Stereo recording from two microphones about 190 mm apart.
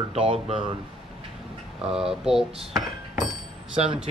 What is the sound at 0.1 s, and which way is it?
Speech, 30° right (ahead or behind).